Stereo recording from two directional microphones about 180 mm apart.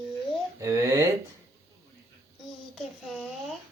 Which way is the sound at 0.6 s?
20° right (ahead or behind).